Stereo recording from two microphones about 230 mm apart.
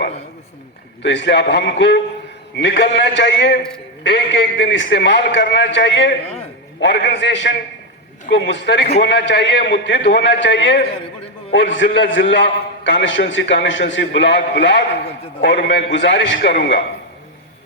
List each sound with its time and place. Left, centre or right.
1.0 s a man's voice: left